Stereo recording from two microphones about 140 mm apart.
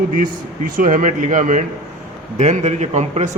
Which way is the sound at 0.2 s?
70° right (ahead or behind).